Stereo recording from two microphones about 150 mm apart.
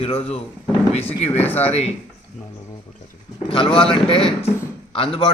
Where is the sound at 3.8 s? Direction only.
35° left (ahead or behind).